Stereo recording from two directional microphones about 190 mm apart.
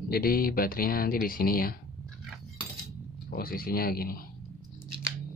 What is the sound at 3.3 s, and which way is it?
Speech, 50° left (ahead or behind).